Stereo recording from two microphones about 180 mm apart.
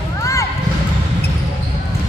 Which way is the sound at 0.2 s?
20° left (ahead or behind).